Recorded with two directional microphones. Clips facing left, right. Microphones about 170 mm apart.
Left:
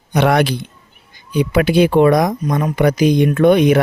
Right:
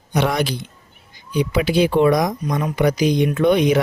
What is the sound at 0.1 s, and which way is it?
Speech, 60° left (ahead or behind).